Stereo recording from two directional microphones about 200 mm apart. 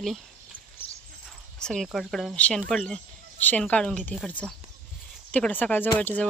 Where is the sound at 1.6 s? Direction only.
Centre (ahead or behind).